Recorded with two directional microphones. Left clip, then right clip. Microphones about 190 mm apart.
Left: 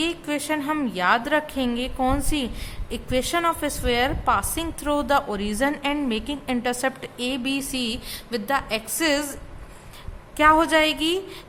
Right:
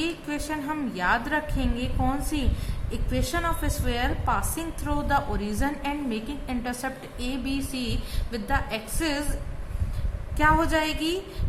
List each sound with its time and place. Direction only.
0.0 s a woman's voice: 45° left (ahead or behind)
10.3 s a woman's voice: 45° left (ahead or behind)